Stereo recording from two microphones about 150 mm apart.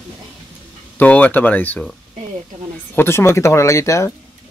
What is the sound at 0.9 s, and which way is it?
A man's voice, 10° left (ahead or behind).